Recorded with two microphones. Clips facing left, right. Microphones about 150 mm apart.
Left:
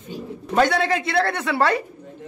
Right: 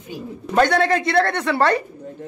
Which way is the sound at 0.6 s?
5° left (ahead or behind).